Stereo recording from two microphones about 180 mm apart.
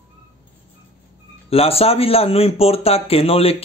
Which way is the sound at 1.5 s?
35° left (ahead or behind).